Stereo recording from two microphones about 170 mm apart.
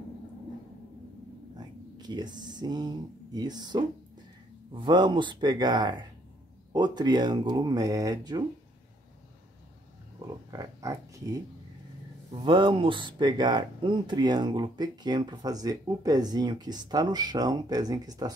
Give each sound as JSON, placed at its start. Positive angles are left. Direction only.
{"t": 1.6, "sound": "speech", "side_deg": -25}
{"t": 10.1, "sound": "speech", "side_deg": -25}